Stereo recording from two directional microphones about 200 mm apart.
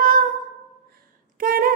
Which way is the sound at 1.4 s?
45° right (ahead or behind).